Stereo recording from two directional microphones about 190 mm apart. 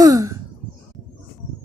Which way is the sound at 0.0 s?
20° right (ahead or behind).